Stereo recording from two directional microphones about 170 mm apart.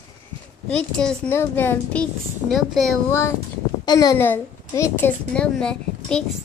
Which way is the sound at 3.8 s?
20° left (ahead or behind).